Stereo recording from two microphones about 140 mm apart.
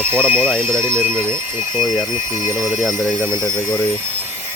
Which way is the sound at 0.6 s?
15° right (ahead or behind).